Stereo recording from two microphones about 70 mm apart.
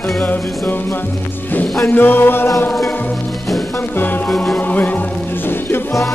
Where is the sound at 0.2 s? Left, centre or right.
Left.